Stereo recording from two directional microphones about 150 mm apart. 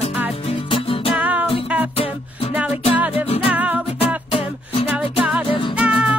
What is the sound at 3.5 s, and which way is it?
Music, 10° right (ahead or behind).